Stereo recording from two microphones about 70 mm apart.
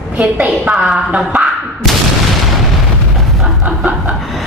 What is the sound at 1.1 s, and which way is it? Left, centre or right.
Speech, centre.